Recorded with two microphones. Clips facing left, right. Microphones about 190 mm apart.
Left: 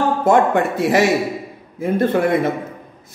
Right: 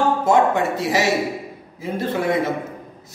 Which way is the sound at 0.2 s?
55° left (ahead or behind).